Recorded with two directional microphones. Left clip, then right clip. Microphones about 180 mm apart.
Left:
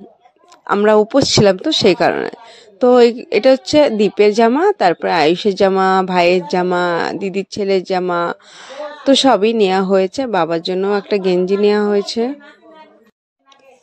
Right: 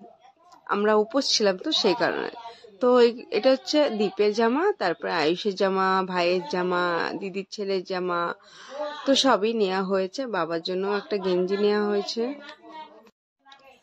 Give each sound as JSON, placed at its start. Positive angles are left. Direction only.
{"t": 0.7, "sound": "a woman's voice", "side_deg": 40}